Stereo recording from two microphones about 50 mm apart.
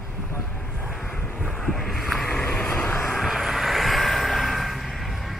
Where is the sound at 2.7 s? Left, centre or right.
Left.